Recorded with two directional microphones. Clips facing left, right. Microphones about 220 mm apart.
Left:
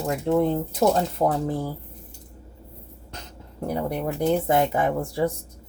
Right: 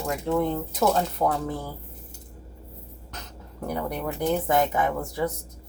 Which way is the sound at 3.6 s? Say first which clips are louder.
Left 3 dB; 30° left (ahead or behind).